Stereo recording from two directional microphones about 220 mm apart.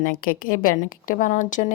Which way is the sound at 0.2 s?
40° left (ahead or behind).